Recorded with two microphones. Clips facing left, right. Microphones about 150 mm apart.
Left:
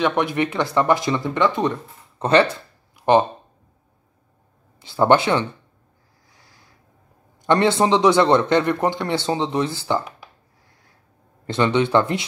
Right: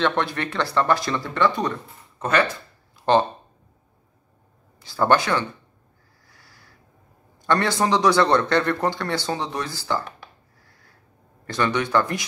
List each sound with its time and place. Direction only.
0.0 s a man's voice: 15° left (ahead or behind)
3.0 s a sound: 20° left (ahead or behind)
4.7 s a man's voice: 20° left (ahead or behind)
6.2 s a sound: 20° left (ahead or behind)
7.4 s a man's voice: 20° left (ahead or behind)
11.4 s a man's voice: 20° left (ahead or behind)